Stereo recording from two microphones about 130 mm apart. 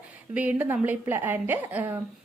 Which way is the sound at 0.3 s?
10° right (ahead or behind).